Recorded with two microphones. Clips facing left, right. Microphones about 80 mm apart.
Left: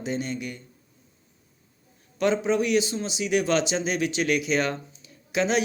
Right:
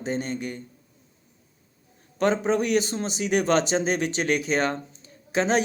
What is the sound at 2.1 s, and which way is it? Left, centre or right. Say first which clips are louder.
A man's voice: even; right.